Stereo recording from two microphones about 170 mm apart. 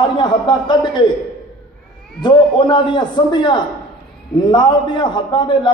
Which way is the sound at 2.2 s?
25° left (ahead or behind).